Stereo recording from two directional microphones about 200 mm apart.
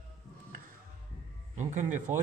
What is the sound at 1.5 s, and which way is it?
Speech, 40° right (ahead or behind).